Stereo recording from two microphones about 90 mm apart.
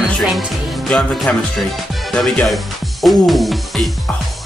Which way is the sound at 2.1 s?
Centre (ahead or behind).